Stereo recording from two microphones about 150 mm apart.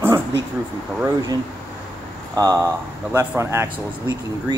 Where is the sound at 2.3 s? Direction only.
25° right (ahead or behind).